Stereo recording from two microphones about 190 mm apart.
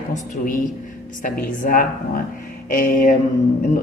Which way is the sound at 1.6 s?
45° left (ahead or behind).